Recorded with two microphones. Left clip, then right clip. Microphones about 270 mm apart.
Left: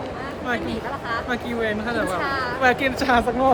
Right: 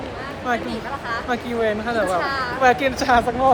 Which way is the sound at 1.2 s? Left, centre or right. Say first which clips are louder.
Right 3 dB; centre.